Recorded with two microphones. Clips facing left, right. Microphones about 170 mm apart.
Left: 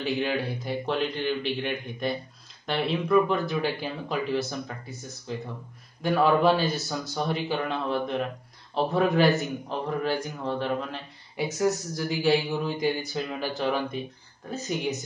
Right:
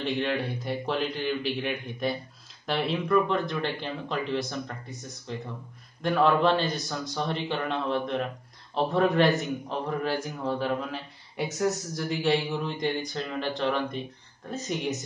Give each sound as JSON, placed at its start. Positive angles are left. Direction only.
{"t": 0.0, "sound": "a man's voice", "side_deg": 5}